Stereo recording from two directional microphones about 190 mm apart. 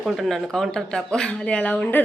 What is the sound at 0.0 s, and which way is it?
Speech, centre (ahead or behind).